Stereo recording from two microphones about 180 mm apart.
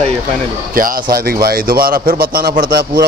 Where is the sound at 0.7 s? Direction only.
50° right (ahead or behind).